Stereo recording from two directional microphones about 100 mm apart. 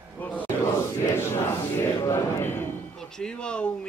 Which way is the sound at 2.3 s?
20° left (ahead or behind).